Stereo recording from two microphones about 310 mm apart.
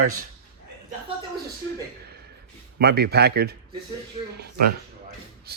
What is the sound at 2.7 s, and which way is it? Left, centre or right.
Speech, right.